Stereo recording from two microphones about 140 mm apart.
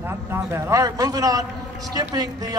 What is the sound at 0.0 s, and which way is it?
A man's voice, 15° right (ahead or behind).